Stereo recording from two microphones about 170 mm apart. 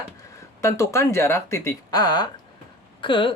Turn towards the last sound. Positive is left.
turn(degrees=30)  # may be behind; listen again after turning